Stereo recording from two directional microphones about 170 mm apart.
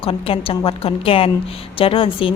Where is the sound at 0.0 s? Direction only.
35° left (ahead or behind).